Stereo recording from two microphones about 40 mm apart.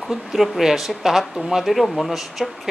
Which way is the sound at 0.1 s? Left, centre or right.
Centre.